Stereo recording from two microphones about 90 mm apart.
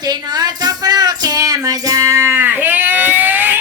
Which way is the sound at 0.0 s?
50° right (ahead or behind).